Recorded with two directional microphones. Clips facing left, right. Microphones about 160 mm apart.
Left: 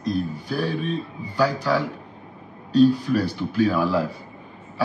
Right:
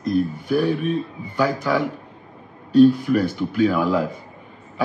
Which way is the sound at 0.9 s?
20° right (ahead or behind).